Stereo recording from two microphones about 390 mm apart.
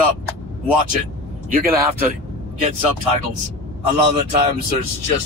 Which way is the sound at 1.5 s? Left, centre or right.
Right.